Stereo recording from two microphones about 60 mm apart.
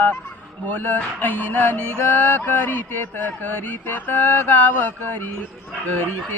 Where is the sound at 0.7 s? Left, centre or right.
Left.